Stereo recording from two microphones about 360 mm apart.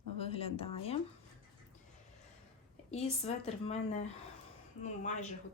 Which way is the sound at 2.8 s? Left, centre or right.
Centre.